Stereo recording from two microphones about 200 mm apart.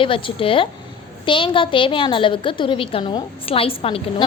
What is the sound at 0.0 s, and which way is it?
A woman's voice, 25° left (ahead or behind).